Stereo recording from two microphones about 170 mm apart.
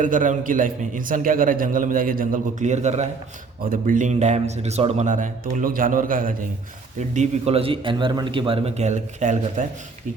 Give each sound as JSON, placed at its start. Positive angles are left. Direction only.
{"t": 0.0, "sound": "a man's voice", "side_deg": -50}
{"t": 3.6, "sound": "a man's voice", "side_deg": -55}
{"t": 7.1, "sound": "a man's voice", "side_deg": -40}